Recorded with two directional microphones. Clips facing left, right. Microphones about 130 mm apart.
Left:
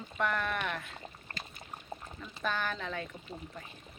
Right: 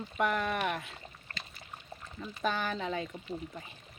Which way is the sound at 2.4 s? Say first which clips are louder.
Right 2 dB; 15° right (ahead or behind).